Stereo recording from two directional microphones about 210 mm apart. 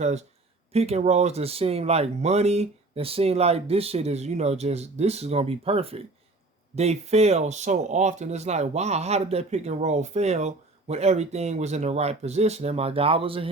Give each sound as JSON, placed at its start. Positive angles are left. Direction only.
{"t": 0.0, "sound": "speech", "side_deg": -30}